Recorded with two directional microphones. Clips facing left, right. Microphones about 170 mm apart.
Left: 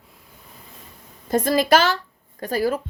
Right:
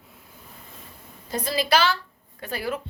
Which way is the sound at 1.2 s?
50° left (ahead or behind).